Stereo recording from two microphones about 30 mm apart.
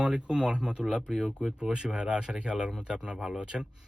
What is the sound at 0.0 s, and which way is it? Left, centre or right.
Speech, right.